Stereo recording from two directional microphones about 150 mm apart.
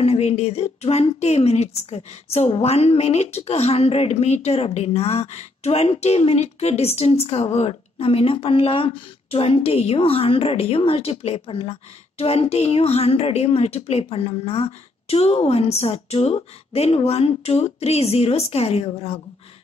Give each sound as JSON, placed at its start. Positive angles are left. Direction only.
{"t": 0.0, "sound": "a woman's voice", "side_deg": 45}